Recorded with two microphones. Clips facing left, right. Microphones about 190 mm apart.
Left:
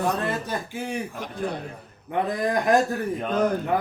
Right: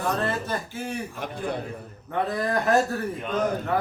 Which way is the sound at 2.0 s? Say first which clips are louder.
Left 2 dB; 15° left (ahead or behind).